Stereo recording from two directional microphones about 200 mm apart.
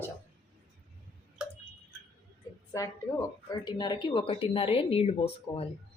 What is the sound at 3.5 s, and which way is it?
Speech, 20° left (ahead or behind).